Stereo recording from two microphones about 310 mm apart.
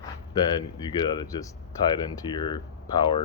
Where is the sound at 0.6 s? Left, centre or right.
Centre.